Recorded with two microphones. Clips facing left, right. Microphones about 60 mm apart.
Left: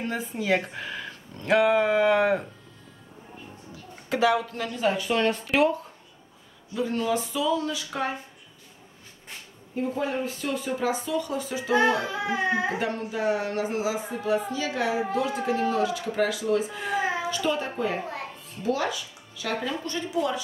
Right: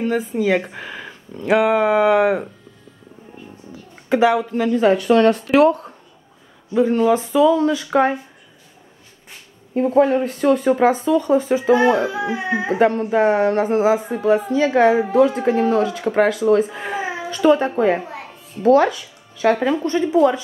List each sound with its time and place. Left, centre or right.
0.0 s speech: right
0.7 s a sound: right
1.4 s speech: centre
4.1 s speech: right
4.7 s speech: right
6.7 s a woman's voice: right
9.8 s speech: right
12.1 s speech: centre
12.6 s a woman's voice: right
19.7 s a woman's voice: right